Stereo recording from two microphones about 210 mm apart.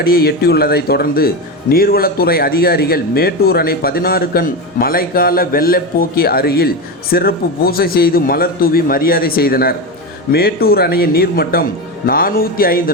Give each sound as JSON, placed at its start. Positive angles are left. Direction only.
{"t": 0.0, "sound": "a man's voice", "side_deg": 45}